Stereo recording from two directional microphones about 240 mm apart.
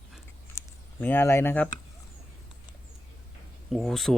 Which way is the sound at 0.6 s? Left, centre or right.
Centre.